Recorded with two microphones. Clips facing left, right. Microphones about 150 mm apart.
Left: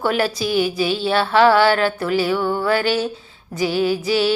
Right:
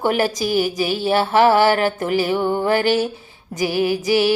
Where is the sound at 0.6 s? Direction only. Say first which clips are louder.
Left 2 dB; 45° right (ahead or behind).